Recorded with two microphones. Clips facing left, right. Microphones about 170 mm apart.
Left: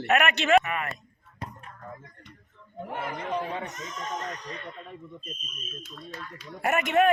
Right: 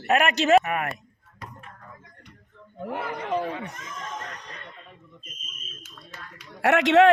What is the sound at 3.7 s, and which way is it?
Speech, 55° right (ahead or behind).